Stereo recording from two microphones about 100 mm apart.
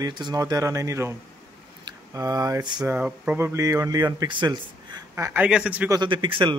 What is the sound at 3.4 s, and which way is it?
Speech, 30° right (ahead or behind).